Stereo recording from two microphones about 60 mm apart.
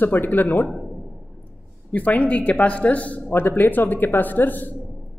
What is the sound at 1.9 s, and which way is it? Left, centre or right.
A man's voice, left.